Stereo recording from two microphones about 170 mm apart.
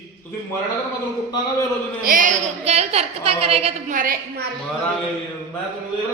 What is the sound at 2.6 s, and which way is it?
A woman's voice, 40° right (ahead or behind).